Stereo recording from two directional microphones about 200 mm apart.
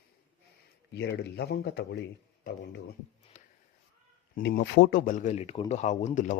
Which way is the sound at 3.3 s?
35° left (ahead or behind).